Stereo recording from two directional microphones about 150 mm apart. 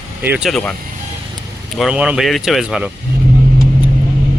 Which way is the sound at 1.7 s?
5° right (ahead or behind).